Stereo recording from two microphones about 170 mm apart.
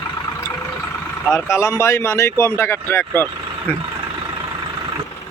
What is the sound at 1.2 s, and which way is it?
Speech, 15° left (ahead or behind).